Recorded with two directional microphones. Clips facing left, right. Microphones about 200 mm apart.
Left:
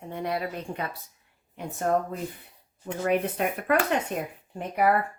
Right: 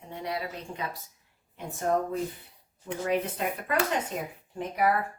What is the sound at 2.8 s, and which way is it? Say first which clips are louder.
Speech: left 3 dB; 60° left (ahead or behind).